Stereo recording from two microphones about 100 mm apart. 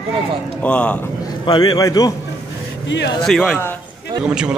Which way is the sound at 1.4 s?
45° left (ahead or behind).